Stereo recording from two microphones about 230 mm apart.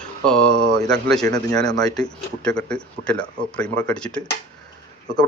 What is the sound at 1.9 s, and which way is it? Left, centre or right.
Speech, centre.